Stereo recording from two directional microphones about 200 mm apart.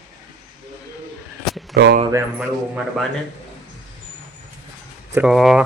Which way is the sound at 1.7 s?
55° right (ahead or behind).